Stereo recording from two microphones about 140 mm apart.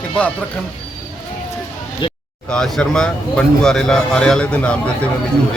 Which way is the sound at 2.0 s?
35° left (ahead or behind).